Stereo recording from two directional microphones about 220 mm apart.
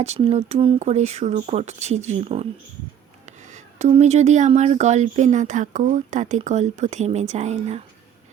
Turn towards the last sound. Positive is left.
turn(degrees=-30)  # may be behind; listen again after turning